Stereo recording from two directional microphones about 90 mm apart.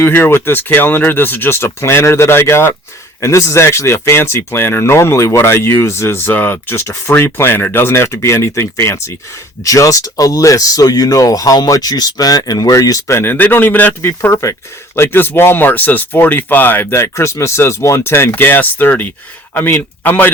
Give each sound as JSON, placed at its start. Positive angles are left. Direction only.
{"t": 0.0, "sound": "speech", "side_deg": 25}
{"t": 13.1, "sound": "speech", "side_deg": 25}